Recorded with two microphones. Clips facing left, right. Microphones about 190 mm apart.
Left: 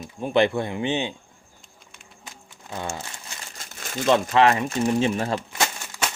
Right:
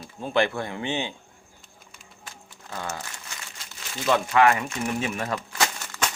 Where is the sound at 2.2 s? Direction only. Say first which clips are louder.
Left 1 dB; 20° left (ahead or behind).